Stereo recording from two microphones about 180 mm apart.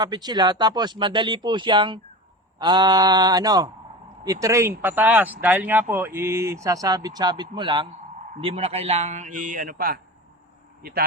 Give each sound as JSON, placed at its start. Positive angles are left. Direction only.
{"t": 0.0, "sound": "a man's voice", "side_deg": -25}